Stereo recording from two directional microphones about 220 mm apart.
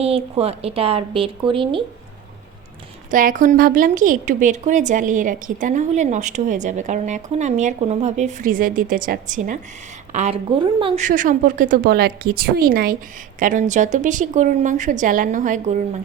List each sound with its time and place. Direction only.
0.0 s speech: 25° right (ahead or behind)
3.1 s a woman's voice: 35° right (ahead or behind)